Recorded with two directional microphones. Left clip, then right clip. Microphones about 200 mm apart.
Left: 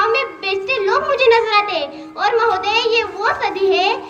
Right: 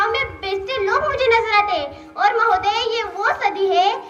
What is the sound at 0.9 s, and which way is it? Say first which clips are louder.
Music: left 3 dB; 25° right (ahead or behind).